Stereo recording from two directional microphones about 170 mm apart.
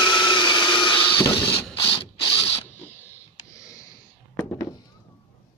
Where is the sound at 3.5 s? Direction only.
20° left (ahead or behind).